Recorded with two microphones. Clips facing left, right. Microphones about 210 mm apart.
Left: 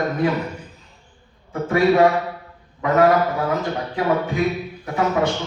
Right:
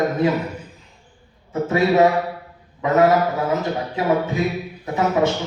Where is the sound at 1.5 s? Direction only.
20° right (ahead or behind).